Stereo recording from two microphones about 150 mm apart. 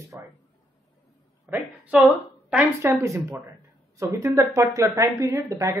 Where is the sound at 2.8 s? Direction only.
20° right (ahead or behind).